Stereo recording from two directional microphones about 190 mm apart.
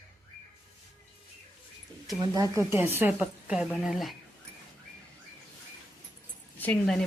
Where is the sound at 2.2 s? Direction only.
20° right (ahead or behind); by 4.1 s centre (ahead or behind).